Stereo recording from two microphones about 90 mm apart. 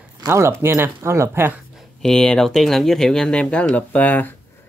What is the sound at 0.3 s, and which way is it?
Speech, 30° right (ahead or behind).